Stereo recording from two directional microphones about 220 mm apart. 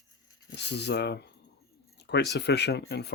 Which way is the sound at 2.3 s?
50° left (ahead or behind).